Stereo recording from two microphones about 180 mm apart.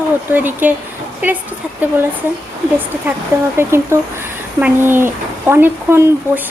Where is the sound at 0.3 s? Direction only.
10° right (ahead or behind).